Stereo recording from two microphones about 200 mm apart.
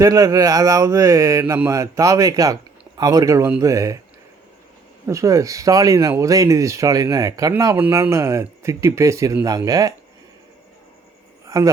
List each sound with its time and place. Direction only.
0.0 s speech: 15° right (ahead or behind)
5.0 s speech: 15° right (ahead or behind)
11.4 s a sound: 15° right (ahead or behind)